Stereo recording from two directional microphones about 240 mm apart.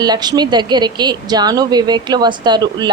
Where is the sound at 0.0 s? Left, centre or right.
Centre.